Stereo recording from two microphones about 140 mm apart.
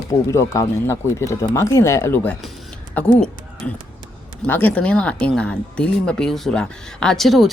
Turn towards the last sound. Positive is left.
turn(degrees=0)  # may be behind; listen again after turning